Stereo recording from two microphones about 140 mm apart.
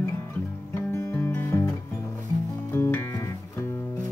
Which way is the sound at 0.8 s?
20° left (ahead or behind).